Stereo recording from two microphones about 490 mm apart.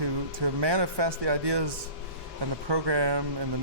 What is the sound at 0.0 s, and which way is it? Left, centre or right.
A man's voice, right.